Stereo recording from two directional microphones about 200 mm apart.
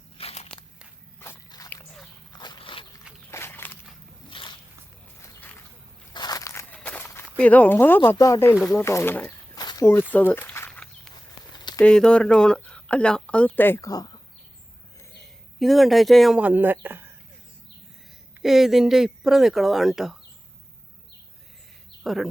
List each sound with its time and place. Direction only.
0.2 s walk: 30° left (ahead or behind)
1.2 s walk: 15° left (ahead or behind)
2.4 s a sound: 25° left (ahead or behind)
3.2 s walk: 10° left (ahead or behind)
4.3 s walk: 25° left (ahead or behind)
6.1 s crushing: 20° left (ahead or behind)
6.7 s speech: 10° left (ahead or behind)
10.1 s a sound: 10° left (ahead or behind)
11.8 s speech: 5° left (ahead or behind)
15.5 s speech: centre (ahead or behind)
18.4 s speech: centre (ahead or behind)
22.0 s speech: centre (ahead or behind)